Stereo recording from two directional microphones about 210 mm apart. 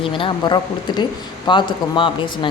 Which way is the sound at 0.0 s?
25° left (ahead or behind).